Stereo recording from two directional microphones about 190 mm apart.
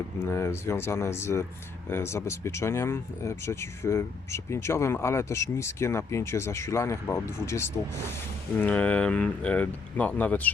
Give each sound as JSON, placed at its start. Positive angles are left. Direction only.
{"t": 0.2, "sound": "speech", "side_deg": 15}